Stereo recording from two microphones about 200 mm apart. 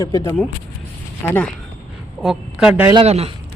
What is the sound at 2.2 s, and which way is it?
Speech, 5° right (ahead or behind).